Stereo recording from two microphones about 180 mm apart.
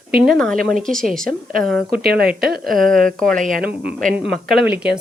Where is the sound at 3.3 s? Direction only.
45° right (ahead or behind).